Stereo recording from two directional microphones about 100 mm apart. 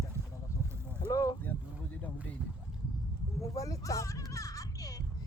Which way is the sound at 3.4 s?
35° left (ahead or behind).